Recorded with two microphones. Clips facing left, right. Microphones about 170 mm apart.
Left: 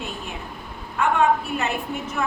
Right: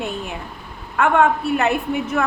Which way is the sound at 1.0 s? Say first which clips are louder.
Right 3 dB; 60° right (ahead or behind).